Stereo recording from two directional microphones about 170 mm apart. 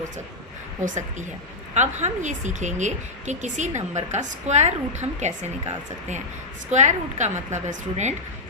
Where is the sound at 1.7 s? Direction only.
45° right (ahead or behind).